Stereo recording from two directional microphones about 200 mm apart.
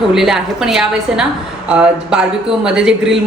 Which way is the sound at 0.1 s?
Centre (ahead or behind).